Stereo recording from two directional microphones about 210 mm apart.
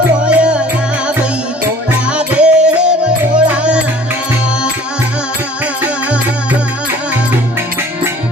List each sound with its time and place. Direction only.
0.3 s music: 5° right (ahead or behind)
1.9 s music: 5° right (ahead or behind)